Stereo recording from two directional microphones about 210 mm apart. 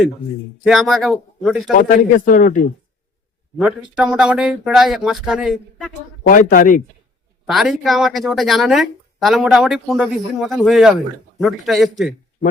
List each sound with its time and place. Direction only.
0.6 s speech: centre (ahead or behind)
1.7 s speech: 40° left (ahead or behind)
3.6 s speech: 5° right (ahead or behind)
6.2 s speech: 40° left (ahead or behind)
7.4 s speech: centre (ahead or behind)